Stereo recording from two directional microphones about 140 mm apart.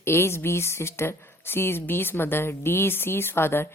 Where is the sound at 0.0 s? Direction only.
20° left (ahead or behind).